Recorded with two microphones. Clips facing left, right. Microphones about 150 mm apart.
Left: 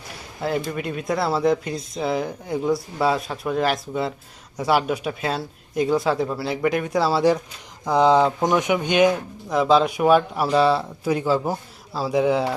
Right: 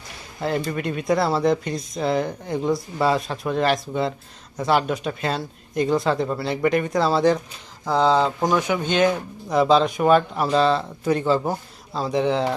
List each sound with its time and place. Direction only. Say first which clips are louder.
0.4 s speech: right 1 dB; centre (ahead or behind)
9.5 s speech: even; centre (ahead or behind)